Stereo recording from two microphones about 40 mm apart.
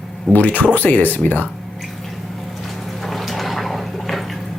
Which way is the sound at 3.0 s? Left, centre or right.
Centre.